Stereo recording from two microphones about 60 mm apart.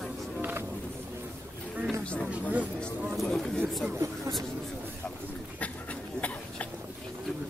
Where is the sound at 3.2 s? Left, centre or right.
Centre.